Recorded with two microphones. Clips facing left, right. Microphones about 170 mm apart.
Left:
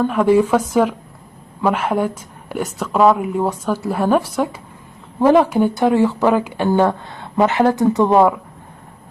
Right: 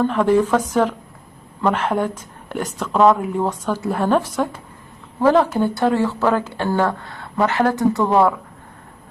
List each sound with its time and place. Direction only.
0.0 s speech: 10° left (ahead or behind)